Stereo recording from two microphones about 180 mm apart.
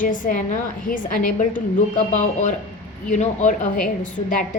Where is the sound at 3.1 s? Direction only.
45° left (ahead or behind).